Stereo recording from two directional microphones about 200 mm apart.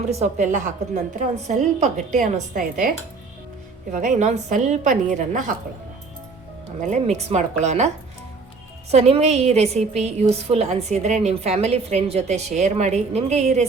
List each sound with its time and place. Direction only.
0.1 s a woman's voice: 35° right (ahead or behind)
3.9 s a woman's voice: 40° right (ahead or behind)
6.8 s a woman's voice: 35° right (ahead or behind)
8.9 s a woman's voice: 30° right (ahead or behind)